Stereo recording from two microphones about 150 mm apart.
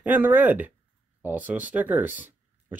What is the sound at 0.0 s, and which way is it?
Speech, 10° right (ahead or behind).